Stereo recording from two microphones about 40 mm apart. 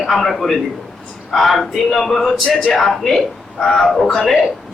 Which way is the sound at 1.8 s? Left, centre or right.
Centre.